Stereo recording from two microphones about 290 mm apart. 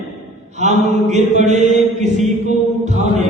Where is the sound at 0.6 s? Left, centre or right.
Right.